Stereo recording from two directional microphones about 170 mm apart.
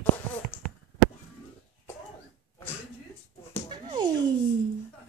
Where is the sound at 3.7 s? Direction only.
25° right (ahead or behind).